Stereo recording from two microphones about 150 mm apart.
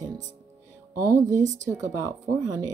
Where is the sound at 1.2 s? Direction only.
55° right (ahead or behind).